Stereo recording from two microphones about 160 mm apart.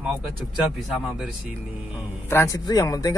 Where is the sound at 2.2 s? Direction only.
15° left (ahead or behind).